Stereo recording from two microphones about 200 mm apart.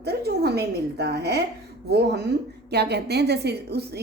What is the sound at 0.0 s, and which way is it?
A woman's voice, 55° right (ahead or behind).